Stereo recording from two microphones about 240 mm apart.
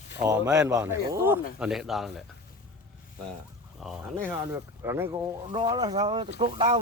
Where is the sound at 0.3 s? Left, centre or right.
Centre.